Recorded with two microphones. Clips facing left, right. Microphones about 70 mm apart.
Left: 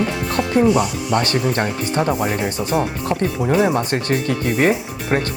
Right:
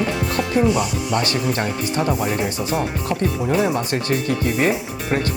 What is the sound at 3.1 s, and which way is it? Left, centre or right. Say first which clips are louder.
Speech: left 2 dB; centre.